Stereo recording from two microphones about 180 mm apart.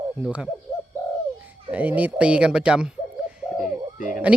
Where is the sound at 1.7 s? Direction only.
10° right (ahead or behind).